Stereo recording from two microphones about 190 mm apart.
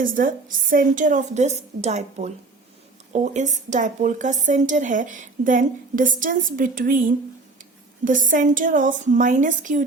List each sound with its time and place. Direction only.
0.0 s a woman's voice: 45° right (ahead or behind)